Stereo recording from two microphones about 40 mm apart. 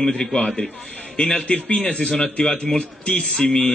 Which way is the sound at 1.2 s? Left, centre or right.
Left.